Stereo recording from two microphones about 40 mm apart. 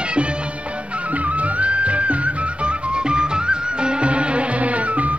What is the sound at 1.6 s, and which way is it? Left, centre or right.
Music, right.